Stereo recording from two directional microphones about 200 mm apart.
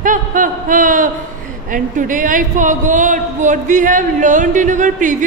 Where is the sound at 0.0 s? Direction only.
40° right (ahead or behind).